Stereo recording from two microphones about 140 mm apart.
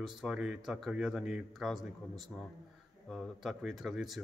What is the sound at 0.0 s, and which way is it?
Speech, 5° right (ahead or behind).